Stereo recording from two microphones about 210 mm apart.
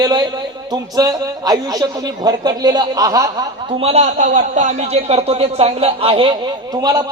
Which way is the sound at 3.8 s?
30° right (ahead or behind).